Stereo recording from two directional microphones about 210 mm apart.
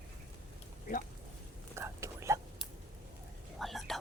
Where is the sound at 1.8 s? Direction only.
15° right (ahead or behind).